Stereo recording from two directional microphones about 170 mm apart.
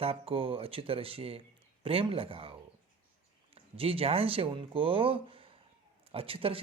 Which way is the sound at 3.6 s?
35° right (ahead or behind).